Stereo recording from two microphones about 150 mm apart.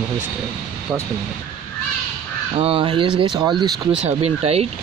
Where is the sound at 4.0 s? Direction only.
45° right (ahead or behind).